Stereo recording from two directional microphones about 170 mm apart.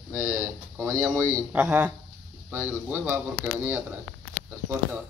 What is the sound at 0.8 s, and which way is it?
Speech, 15° right (ahead or behind).